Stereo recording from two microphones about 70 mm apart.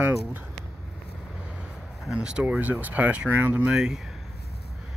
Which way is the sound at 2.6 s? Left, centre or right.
Right.